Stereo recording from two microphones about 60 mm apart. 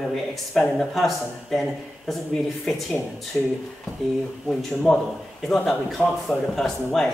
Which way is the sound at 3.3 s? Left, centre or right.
Left.